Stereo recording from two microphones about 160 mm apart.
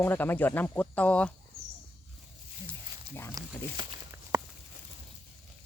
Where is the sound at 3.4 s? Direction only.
25° right (ahead or behind).